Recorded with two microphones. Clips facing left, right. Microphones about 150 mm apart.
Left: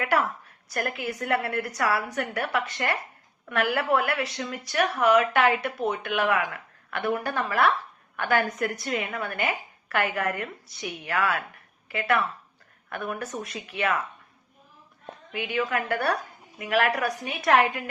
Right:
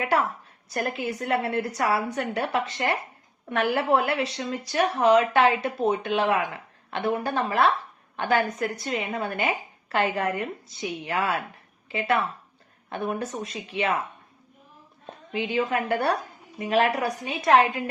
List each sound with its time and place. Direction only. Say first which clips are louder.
0.0 s a woman's voice: right 1 dB; 25° right (ahead or behind)
15.3 s a woman's voice: right 2 dB; 25° right (ahead or behind)